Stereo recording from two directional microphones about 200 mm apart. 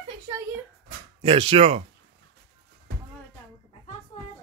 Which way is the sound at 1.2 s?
25° right (ahead or behind).